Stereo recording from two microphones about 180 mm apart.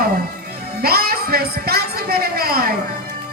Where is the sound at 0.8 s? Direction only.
60° right (ahead or behind).